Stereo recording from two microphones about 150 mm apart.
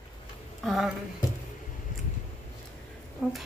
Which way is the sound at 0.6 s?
Centre (ahead or behind).